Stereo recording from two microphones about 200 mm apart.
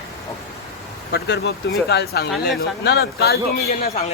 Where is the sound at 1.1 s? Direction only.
55° left (ahead or behind).